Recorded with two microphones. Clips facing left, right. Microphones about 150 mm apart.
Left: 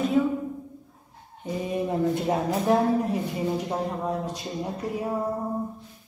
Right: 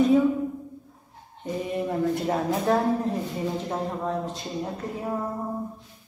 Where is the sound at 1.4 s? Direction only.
15° left (ahead or behind).